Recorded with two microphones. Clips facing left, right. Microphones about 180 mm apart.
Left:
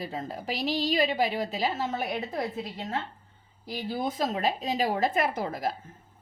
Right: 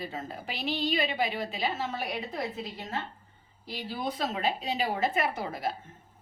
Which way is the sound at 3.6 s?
45° left (ahead or behind).